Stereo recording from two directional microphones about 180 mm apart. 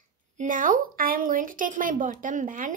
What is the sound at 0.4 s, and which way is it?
Speech, 50° right (ahead or behind).